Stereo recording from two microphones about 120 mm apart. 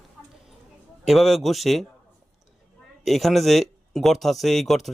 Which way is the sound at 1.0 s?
Centre (ahead or behind).